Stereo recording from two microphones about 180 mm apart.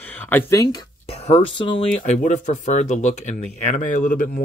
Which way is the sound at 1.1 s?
35° left (ahead or behind).